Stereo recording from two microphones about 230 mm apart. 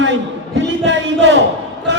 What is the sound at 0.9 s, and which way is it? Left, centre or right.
Speech, right.